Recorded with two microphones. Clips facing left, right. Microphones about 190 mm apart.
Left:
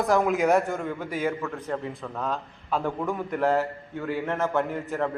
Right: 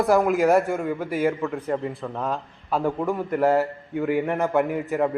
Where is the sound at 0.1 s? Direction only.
Centre (ahead or behind).